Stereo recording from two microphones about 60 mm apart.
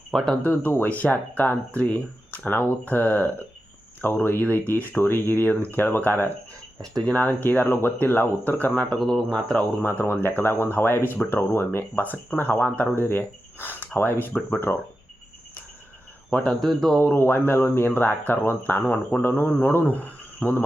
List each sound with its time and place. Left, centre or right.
0.1 s speech: centre
0.7 s speech: left
9.0 s speech: centre
10.2 s speech: left
16.3 s speech: centre
17.2 s a man's voice: left